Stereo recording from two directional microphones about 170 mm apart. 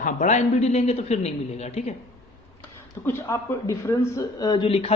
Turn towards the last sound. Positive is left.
turn(degrees=35)  # may be behind; listen again after turning